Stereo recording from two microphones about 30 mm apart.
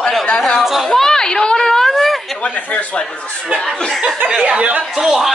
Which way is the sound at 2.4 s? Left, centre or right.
Left.